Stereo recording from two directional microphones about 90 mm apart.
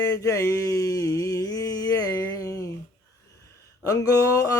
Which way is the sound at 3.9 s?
40° left (ahead or behind).